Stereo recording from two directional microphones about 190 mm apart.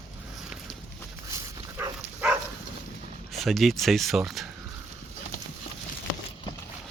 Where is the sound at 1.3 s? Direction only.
15° right (ahead or behind).